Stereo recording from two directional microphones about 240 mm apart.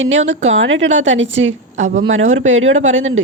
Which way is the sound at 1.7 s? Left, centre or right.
Right.